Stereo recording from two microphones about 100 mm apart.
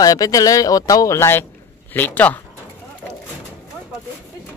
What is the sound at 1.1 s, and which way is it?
Speech, 25° left (ahead or behind).